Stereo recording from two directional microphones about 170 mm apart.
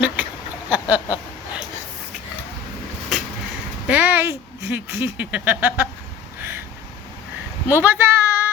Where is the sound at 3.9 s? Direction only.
10° right (ahead or behind).